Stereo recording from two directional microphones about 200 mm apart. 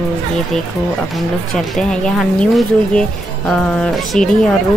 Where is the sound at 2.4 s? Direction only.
5° left (ahead or behind).